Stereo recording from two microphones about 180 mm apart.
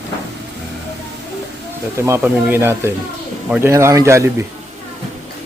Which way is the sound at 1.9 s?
15° right (ahead or behind).